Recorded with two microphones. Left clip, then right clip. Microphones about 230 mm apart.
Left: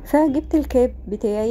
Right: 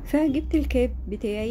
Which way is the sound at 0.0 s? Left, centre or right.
Centre.